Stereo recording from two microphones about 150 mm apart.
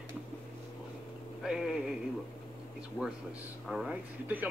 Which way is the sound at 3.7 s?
5° right (ahead or behind).